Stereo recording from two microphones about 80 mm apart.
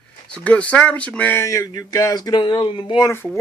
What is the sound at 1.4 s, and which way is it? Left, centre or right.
Speech, left.